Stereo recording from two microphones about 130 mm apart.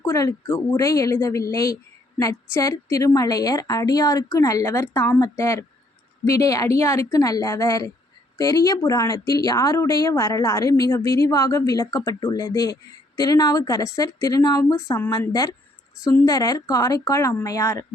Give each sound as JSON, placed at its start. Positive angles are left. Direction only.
{"t": 0.0, "sound": "speech", "side_deg": 20}